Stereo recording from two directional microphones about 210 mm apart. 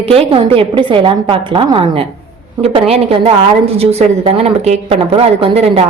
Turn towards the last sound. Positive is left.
turn(degrees=-30)  # may be behind; listen again after turning